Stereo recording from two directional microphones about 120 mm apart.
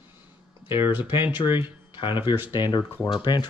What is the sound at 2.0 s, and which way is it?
A man's voice, 45° left (ahead or behind).